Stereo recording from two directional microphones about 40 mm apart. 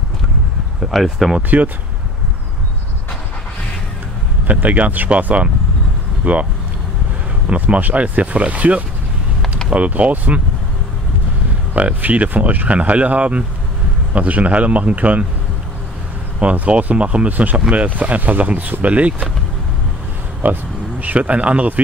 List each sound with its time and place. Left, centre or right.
0.7 s speech: centre
1.5 s speech: right
4.5 s speech: right
7.5 s speech: right
11.7 s speech: right
16.5 s speech: right
20.4 s speech: right
21.0 s speech: right